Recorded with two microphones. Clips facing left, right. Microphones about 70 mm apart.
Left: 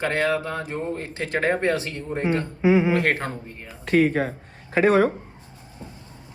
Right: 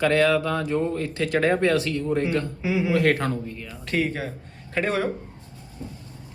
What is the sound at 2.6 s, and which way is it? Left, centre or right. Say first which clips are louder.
Speech: left 6 dB; left.